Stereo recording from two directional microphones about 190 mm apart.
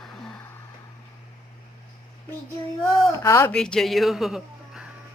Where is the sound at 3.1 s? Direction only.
15° left (ahead or behind).